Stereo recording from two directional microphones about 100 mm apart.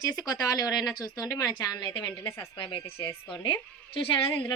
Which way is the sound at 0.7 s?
Centre (ahead or behind).